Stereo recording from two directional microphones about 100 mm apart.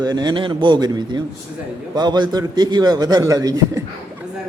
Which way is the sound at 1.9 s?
45° right (ahead or behind).